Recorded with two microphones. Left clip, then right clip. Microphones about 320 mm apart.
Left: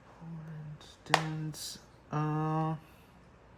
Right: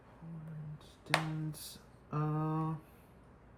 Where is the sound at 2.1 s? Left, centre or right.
Left.